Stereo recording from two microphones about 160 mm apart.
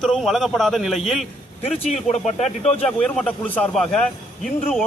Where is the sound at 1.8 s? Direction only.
45° left (ahead or behind).